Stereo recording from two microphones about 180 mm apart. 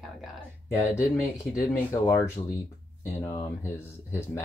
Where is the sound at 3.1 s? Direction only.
10° left (ahead or behind).